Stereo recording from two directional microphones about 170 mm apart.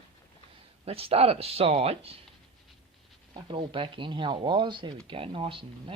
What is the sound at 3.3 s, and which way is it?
Speech, 30° right (ahead or behind).